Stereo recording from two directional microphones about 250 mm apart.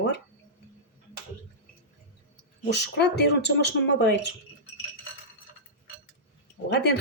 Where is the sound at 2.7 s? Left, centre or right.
Left.